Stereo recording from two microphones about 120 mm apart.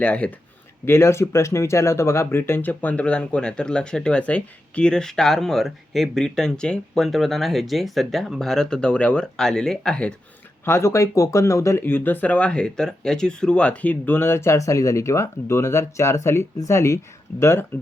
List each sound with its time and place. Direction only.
0.0 s speech: 10° left (ahead or behind)
0.9 s speech: 20° left (ahead or behind)
10.7 s speech: 20° left (ahead or behind)